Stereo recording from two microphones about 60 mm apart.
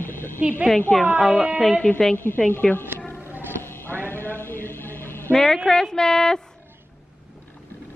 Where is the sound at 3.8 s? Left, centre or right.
Left.